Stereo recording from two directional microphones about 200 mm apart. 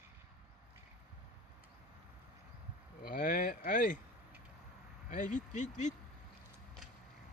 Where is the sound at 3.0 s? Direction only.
45° left (ahead or behind).